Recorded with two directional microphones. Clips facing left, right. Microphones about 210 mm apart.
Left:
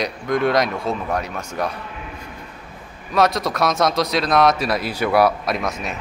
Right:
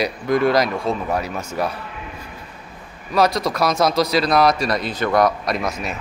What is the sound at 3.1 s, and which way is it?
Speech, centre (ahead or behind).